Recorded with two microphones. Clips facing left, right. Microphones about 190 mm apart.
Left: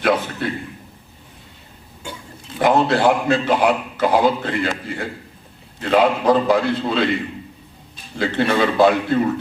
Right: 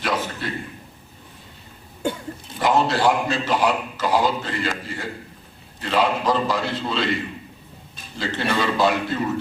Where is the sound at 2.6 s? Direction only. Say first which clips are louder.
Left 4 dB; 55° left (ahead or behind).